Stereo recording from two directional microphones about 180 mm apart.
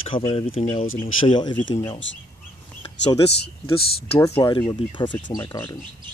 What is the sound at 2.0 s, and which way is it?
Speech, 90° left.